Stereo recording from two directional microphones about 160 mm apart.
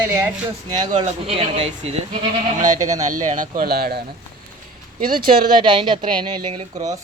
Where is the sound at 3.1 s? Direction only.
55° right (ahead or behind); by 4.0 s 75° right (ahead or behind).